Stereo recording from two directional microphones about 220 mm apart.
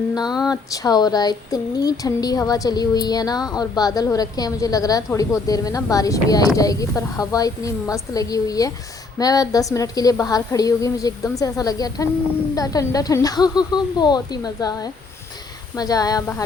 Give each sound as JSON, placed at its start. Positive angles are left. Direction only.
{"t": 0.4, "sound": "speech", "side_deg": 15}